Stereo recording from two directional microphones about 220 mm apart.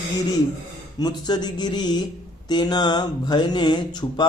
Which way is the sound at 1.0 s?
20° left (ahead or behind).